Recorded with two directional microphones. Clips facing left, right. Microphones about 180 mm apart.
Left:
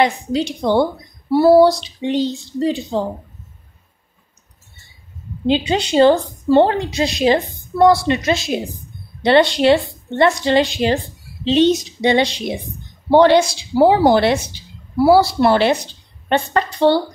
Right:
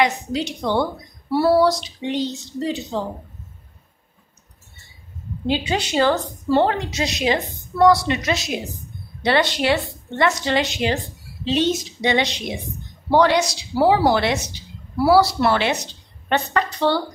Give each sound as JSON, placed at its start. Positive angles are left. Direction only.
{"t": 0.0, "sound": "a woman's voice", "side_deg": 30}
{"t": 5.5, "sound": "a woman's voice", "side_deg": 25}